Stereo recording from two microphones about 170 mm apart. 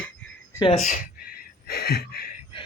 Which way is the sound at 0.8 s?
55° left (ahead or behind).